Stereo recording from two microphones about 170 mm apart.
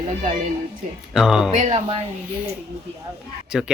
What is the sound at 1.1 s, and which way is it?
Speech, 5° right (ahead or behind).